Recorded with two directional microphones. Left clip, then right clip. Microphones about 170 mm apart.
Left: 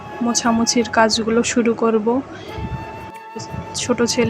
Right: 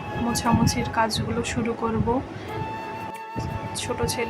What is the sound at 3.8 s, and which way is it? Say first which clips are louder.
Speech: left 9 dB; 30° left (ahead or behind).